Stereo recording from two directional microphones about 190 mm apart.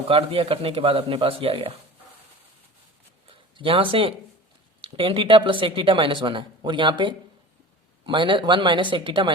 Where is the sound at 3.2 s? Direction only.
25° right (ahead or behind).